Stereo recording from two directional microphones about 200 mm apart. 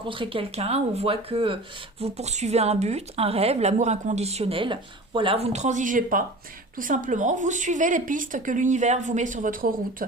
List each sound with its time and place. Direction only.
0.0 s a woman's voice: 25° right (ahead or behind); by 10.1 s 45° right (ahead or behind)